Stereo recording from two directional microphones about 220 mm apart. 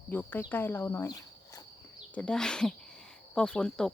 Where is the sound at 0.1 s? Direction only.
10° left (ahead or behind).